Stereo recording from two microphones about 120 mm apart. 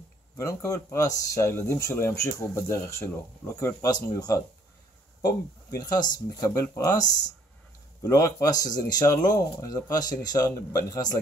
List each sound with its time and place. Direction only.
0.4 s speech: 25° left (ahead or behind)
5.7 s speech: 30° left (ahead or behind)